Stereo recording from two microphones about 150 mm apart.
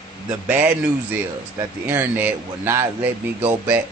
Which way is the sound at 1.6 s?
15° right (ahead or behind).